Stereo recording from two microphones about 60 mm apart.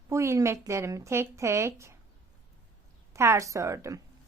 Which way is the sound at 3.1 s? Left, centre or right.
Right.